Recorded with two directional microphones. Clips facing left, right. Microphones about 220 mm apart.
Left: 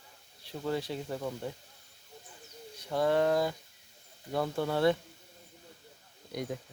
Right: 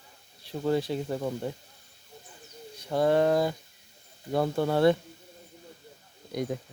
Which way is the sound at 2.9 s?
35° right (ahead or behind).